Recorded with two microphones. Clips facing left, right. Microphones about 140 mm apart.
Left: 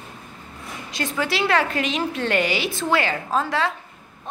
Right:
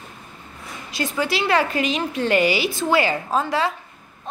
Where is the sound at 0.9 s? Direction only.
5° right (ahead or behind).